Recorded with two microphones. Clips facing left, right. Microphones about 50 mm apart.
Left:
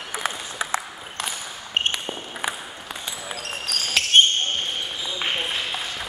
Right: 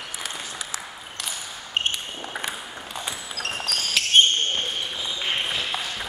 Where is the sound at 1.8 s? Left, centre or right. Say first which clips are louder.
Left 2 dB; left.